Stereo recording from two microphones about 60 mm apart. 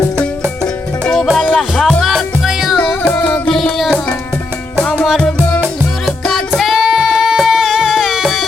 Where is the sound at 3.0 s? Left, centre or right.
Centre.